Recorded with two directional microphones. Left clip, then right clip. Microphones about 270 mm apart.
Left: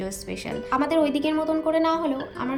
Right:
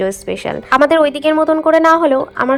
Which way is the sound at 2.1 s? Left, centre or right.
Right.